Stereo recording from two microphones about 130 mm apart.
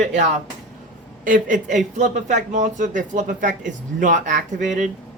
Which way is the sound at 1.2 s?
85° right.